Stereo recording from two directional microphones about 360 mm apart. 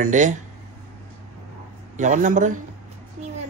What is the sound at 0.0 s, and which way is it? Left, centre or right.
Speech, right.